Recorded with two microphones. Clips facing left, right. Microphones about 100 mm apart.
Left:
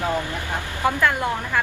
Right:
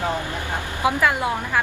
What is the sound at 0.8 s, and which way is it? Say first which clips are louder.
Speech: right 1 dB; 5° right (ahead or behind).